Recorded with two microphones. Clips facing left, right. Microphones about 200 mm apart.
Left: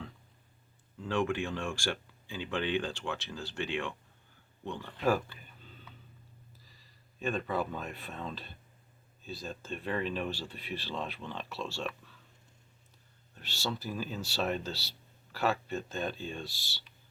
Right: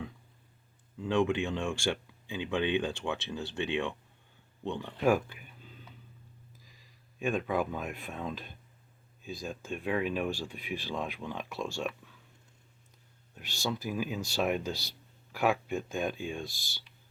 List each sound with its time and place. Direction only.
0.9 s speech: 20° right (ahead or behind)
7.2 s speech: 10° right (ahead or behind)
13.3 s speech: 10° right (ahead or behind)